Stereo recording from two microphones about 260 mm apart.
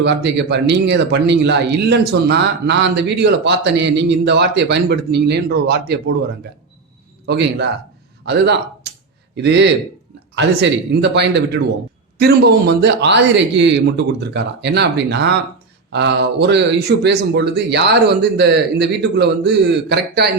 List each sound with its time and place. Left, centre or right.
0.0 s speech: right
7.3 s a man's voice: right